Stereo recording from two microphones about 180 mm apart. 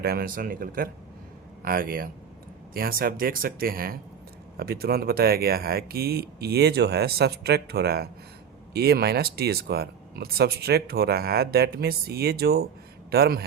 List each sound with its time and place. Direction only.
0.0 s a man's voice: 55° right (ahead or behind)